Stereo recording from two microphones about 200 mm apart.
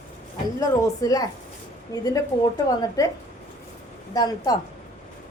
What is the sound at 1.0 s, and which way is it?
Speech, 15° left (ahead or behind).